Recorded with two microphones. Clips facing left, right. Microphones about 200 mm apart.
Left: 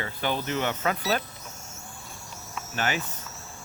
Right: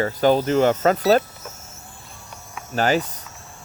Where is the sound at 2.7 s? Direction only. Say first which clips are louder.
Right 10 dB; 40° right (ahead or behind).